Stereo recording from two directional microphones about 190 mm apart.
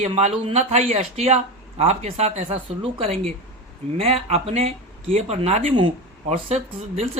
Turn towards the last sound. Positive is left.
turn(degrees=-35)  # may be behind; listen again after turning